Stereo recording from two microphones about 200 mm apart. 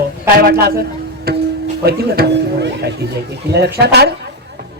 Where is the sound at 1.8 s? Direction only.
55° right (ahead or behind).